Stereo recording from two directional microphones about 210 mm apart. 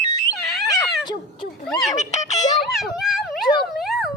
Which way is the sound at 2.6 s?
Centre (ahead or behind).